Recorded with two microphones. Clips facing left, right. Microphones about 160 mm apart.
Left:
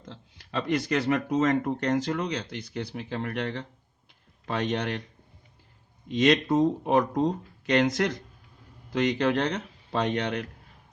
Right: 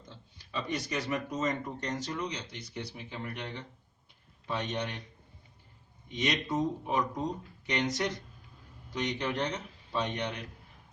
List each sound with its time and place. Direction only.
0.1 s speech: 85° left
6.1 s speech: 90° left